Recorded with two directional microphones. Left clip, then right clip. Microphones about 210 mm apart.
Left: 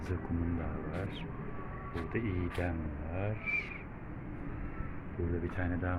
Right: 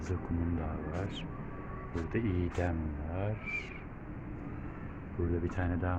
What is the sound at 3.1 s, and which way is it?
Speech, 10° right (ahead or behind).